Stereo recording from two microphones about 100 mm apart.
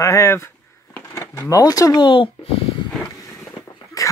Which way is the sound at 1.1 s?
25° left (ahead or behind).